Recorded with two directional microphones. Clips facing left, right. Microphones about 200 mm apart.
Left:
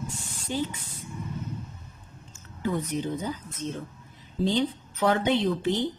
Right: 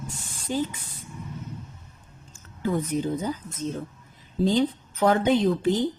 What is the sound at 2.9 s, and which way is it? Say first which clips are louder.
A woman's voice: right 3 dB; 45° right (ahead or behind).